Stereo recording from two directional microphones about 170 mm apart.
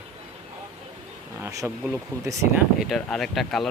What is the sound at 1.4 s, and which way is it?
Speech, 20° right (ahead or behind).